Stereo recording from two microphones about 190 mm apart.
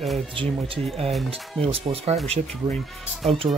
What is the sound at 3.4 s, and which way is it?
Speech, 20° right (ahead or behind).